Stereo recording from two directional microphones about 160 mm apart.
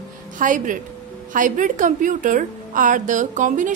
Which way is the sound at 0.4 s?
55° right (ahead or behind).